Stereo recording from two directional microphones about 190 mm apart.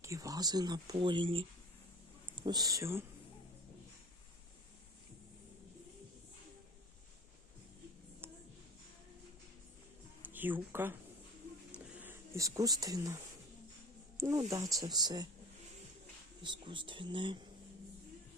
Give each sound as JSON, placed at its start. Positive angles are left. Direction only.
{"t": 0.0, "sound": "speech", "side_deg": -15}
{"t": 10.2, "sound": "speech", "side_deg": -10}
{"t": 11.8, "sound": "a sound", "side_deg": -5}
{"t": 14.2, "sound": "speech", "side_deg": -15}
{"t": 16.4, "sound": "speech", "side_deg": -25}